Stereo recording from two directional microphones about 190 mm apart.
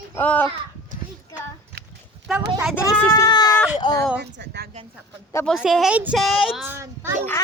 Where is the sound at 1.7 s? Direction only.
60° right (ahead or behind).